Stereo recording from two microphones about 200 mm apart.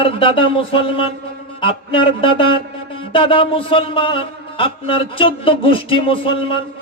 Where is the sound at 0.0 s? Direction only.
25° left (ahead or behind).